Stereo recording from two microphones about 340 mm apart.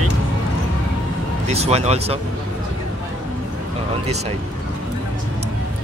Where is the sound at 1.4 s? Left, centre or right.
Centre.